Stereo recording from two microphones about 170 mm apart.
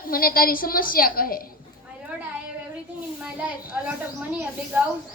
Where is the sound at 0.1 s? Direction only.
55° left (ahead or behind).